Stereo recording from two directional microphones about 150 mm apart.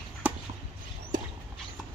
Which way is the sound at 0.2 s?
10° right (ahead or behind).